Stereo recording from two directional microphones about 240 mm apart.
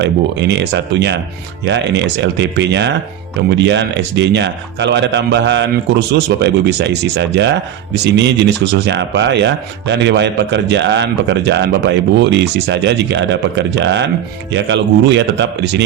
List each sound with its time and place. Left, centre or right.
0.0 s speech: right